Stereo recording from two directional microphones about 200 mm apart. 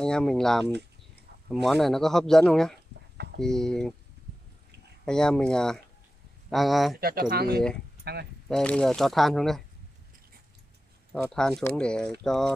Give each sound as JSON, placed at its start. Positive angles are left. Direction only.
{"t": 0.0, "sound": "speech", "side_deg": 5}
{"t": 5.0, "sound": "speech", "side_deg": 5}
{"t": 7.0, "sound": "speech", "side_deg": -50}
{"t": 8.5, "sound": "speech", "side_deg": 5}
{"t": 11.2, "sound": "speech", "side_deg": 5}